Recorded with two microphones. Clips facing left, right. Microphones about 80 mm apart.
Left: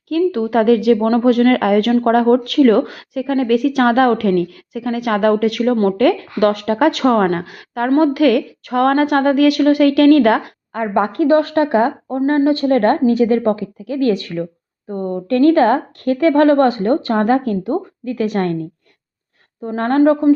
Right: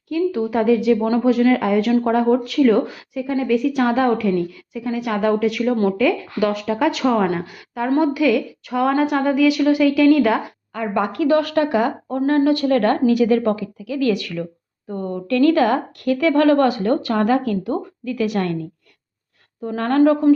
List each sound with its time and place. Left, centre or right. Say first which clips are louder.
0.1 s a woman's voice: left 4 dB; left
1.0 s speech: left 3 dB; left
10.8 s speech: left 4 dB; left
19.6 s speech: left 2 dB; left